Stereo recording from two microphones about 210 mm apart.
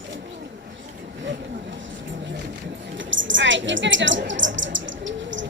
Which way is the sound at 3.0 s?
60° right (ahead or behind).